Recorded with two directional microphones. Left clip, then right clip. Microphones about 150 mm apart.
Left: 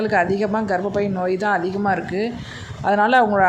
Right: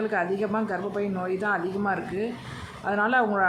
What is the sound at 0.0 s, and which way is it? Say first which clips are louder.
Speech: left 7 dB; 25° left (ahead or behind).